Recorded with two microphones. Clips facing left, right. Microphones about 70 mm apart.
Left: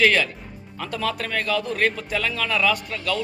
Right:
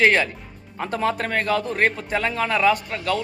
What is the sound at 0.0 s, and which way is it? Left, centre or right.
Speech, right.